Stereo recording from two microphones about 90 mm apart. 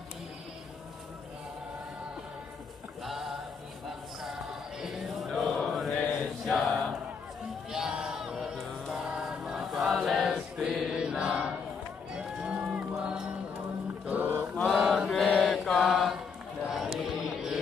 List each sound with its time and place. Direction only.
3.0 s music: 5° right (ahead or behind)
4.2 s chant: 5° right (ahead or behind)
7.7 s a sound: 5° right (ahead or behind)
8.9 s choir: 5° right (ahead or behind)
12.1 s music: 10° right (ahead or behind)
14.0 s mantra: 20° right (ahead or behind)
14.5 s mantra: centre (ahead or behind)
16.6 s a sound: 5° right (ahead or behind)
17.0 s mantra: 5° right (ahead or behind)